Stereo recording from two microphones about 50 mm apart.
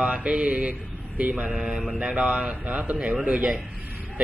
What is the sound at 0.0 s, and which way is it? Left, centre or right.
Mantra, right.